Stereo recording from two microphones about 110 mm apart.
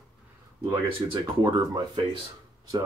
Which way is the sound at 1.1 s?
40° right (ahead or behind).